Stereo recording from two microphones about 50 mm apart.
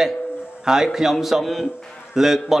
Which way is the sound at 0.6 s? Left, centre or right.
Centre.